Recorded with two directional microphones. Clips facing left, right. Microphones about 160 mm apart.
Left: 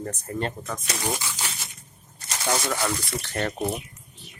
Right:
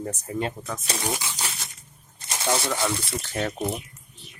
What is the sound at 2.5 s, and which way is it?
Speech, 25° right (ahead or behind).